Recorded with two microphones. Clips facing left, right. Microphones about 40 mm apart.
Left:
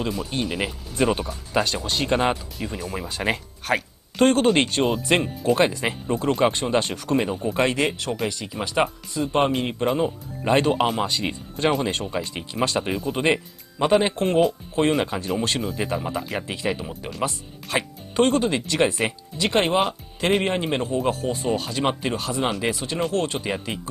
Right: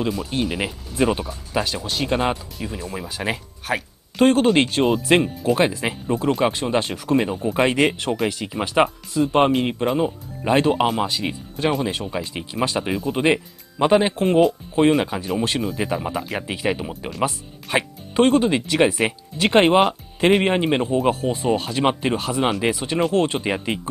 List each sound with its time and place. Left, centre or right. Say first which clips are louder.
0.0 s speech: right 3 dB; centre
7.6 s speech: right 5 dB; centre
8.8 s speech: right 5 dB; centre
19.3 s speech: right 6 dB; right